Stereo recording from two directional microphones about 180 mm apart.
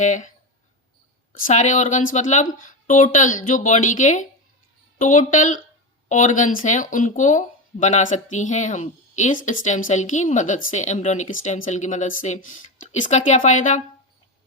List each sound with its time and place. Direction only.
0.0 s speech: 45° left (ahead or behind)